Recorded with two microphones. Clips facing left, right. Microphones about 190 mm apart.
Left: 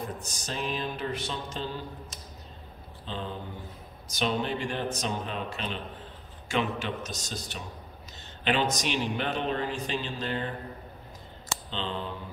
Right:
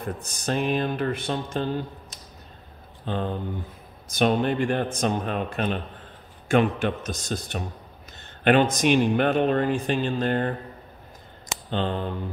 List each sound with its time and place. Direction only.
0.0 s music: 55° right (ahead or behind)
3.1 s music: 55° right (ahead or behind)
4.1 s a man's voice: 55° right (ahead or behind)
11.7 s a man's voice: 50° right (ahead or behind)